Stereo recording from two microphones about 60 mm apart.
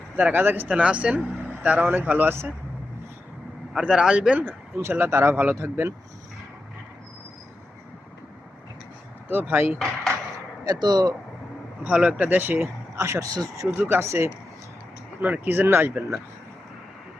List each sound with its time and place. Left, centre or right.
0.2 s speech: right
0.7 s speech: centre; by 2.5 s right
3.8 s speech: centre
4.4 s speech: right
9.3 s speech: right
9.7 s speech: centre
10.7 s speech: right
11.8 s speech: centre
13.0 s speech: right
13.8 s speech: right
15.2 s speech: right